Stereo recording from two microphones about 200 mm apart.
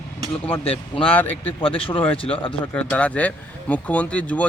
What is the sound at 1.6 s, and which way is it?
Speech, 25° left (ahead or behind).